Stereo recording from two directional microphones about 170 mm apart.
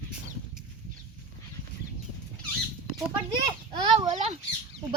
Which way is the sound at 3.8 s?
30° right (ahead or behind).